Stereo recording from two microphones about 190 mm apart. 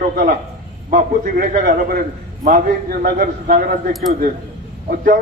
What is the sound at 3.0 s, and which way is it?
Speech, 50° right (ahead or behind).